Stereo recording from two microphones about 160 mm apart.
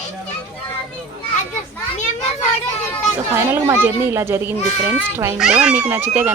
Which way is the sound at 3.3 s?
15° right (ahead or behind).